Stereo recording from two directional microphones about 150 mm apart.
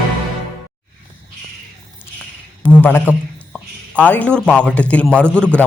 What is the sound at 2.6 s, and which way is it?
A man's voice, 10° left (ahead or behind).